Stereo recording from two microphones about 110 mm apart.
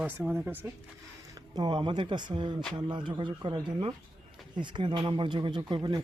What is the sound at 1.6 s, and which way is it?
Speech, 45° right (ahead or behind).